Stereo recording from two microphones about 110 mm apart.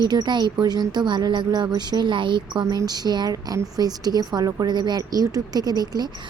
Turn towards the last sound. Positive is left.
turn(degrees=-35)  # may be behind; listen again after turning